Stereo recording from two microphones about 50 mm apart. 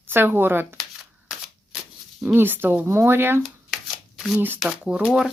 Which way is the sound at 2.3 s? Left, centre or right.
Right.